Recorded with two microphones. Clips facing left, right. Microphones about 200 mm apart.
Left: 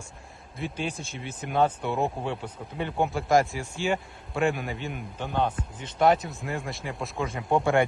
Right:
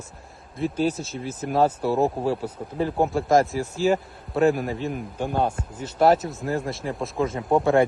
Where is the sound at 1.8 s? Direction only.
35° right (ahead or behind).